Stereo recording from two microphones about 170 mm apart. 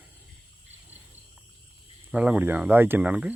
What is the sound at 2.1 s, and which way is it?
Speech, 5° right (ahead or behind).